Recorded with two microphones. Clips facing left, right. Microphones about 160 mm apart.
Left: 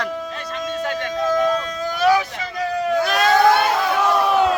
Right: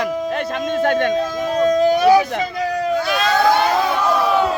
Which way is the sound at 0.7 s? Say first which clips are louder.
Right 8 dB; 60° right (ahead or behind).